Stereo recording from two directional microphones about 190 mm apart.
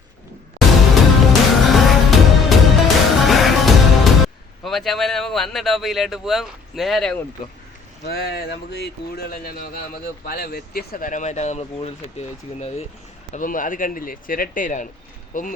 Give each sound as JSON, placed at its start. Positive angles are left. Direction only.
{"t": 1.3, "sound": "music", "side_deg": 0}
{"t": 4.6, "sound": "speech", "side_deg": 0}
{"t": 8.0, "sound": "speech", "side_deg": 55}
{"t": 13.3, "sound": "speech", "side_deg": 45}